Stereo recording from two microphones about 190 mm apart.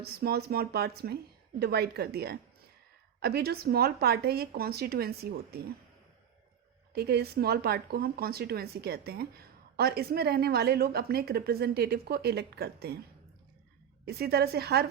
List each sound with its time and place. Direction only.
0.0 s a woman's voice: 55° right (ahead or behind)
6.9 s a woman's voice: 55° right (ahead or behind)
14.0 s a woman's voice: 55° right (ahead or behind)